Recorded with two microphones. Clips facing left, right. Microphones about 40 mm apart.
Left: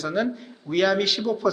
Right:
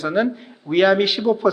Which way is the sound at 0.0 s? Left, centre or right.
Right.